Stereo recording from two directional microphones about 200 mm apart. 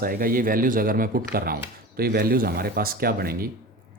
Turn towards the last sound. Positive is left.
turn(degrees=-50)  # may be behind; listen again after turning